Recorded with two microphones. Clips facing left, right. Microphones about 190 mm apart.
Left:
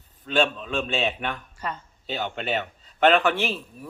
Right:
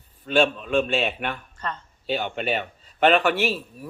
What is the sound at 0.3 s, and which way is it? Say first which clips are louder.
A man's voice: right 3 dB; 10° right (ahead or behind).